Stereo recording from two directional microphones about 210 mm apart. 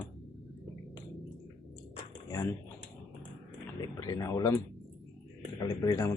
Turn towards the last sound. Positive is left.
turn(degrees=15)  # may be behind; listen again after turning